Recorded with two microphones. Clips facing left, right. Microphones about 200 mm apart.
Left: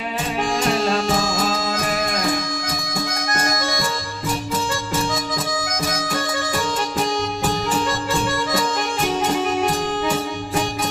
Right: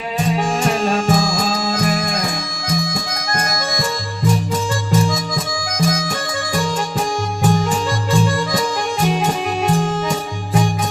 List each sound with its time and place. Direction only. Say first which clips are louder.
1.2 s music: right 2 dB; 35° right (ahead or behind)